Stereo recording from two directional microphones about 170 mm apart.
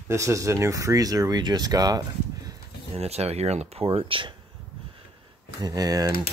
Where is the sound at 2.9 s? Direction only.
40° right (ahead or behind).